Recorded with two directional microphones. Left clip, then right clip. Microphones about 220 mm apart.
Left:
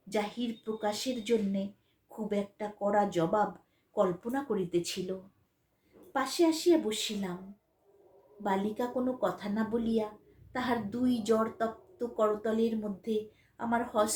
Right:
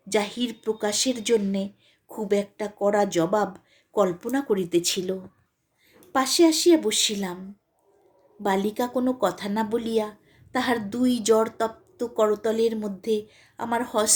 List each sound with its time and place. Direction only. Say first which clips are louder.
0.1 s a woman's voice: right 8 dB; 45° right (ahead or behind)
6.1 s a woman's voice: right 9 dB; 45° right (ahead or behind)
8.4 s a woman's voice: right 7 dB; 45° right (ahead or behind)